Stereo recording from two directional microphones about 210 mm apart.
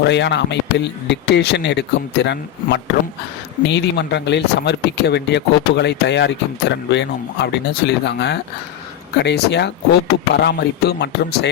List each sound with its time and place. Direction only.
0.0 s speech: 55° left (ahead or behind)